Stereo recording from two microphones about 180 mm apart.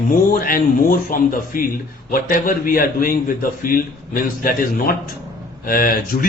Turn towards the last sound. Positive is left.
turn(degrees=50)  # may be behind; listen again after turning